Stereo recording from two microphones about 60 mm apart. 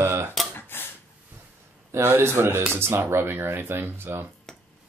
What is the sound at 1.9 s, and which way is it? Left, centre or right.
Speech, right.